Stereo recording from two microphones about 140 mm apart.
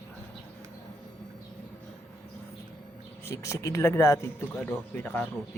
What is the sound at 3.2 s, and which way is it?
Speech, 20° left (ahead or behind).